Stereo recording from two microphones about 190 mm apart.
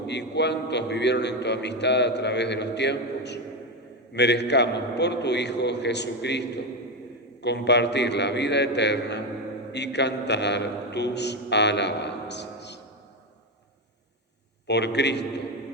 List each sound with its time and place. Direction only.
0.1 s a man's voice: 65° left (ahead or behind)
14.7 s a man's voice: 65° left (ahead or behind)